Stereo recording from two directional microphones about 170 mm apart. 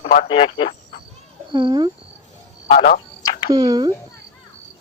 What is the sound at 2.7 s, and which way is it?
Speech, 50° left (ahead or behind).